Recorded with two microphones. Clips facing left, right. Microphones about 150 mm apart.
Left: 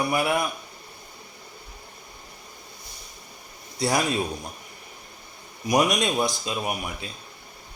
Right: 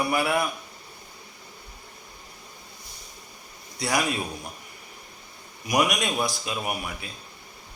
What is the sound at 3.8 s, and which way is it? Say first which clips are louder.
Speech: left 2 dB; 25° left (ahead or behind).